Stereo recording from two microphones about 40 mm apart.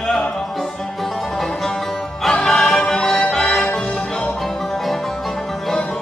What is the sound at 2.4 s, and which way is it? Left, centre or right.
Music, centre.